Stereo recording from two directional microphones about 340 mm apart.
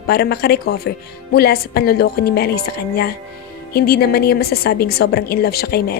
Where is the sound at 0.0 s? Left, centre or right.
Left.